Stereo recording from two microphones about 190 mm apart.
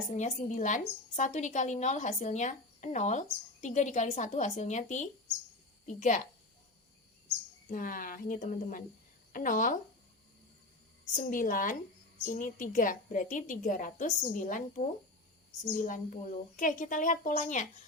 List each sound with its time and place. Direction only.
0.1 s a woman's voice: 40° left (ahead or behind)
7.7 s a woman's voice: 45° left (ahead or behind)
11.1 s a woman's voice: 40° left (ahead or behind)